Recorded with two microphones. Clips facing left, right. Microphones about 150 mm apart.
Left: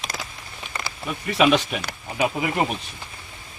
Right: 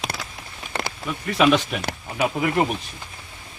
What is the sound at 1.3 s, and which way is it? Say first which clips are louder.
Speech: even; 5° left (ahead or behind).